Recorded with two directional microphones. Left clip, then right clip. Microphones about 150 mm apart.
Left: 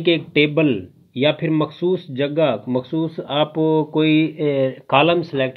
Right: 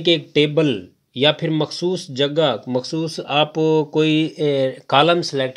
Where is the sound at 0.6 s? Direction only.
40° right (ahead or behind).